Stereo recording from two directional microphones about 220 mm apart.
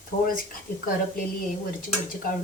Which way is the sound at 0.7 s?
40° left (ahead or behind).